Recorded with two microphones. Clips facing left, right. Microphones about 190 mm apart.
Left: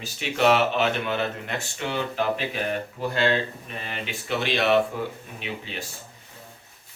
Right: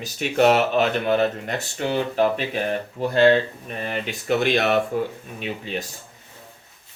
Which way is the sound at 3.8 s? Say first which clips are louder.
Right 8 dB; 45° right (ahead or behind).